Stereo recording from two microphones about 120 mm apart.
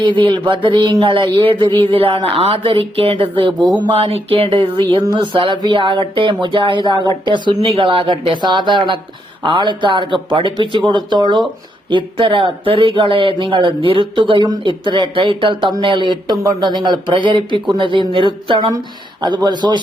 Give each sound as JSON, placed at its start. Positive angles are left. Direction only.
{"t": 0.0, "sound": "speech", "side_deg": -45}